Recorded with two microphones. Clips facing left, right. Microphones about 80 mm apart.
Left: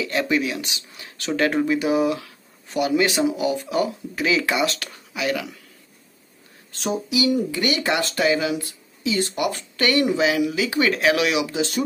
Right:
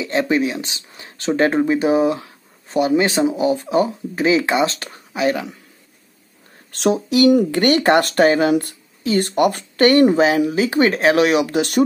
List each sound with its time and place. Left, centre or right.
0.0 s speech: right
6.7 s speech: right
11.5 s speech: right